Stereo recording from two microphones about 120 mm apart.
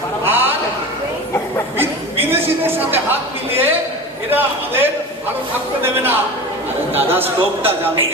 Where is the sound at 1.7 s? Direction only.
20° right (ahead or behind).